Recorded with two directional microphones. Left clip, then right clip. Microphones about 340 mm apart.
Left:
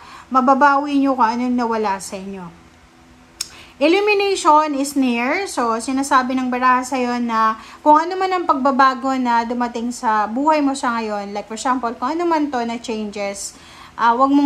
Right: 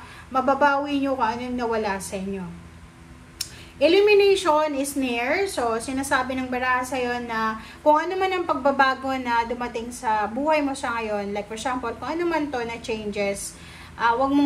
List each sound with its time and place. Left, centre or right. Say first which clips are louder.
0.3 s speech: left 7 dB; centre
3.3 s speech: left 3 dB; centre